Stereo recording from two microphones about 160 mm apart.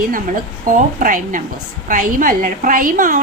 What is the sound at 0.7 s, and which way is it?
A woman's voice, 55° right (ahead or behind).